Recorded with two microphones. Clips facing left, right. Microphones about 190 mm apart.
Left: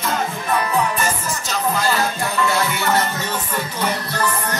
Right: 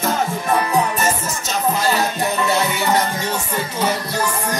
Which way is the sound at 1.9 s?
20° right (ahead or behind).